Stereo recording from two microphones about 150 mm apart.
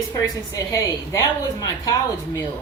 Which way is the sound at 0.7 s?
20° left (ahead or behind).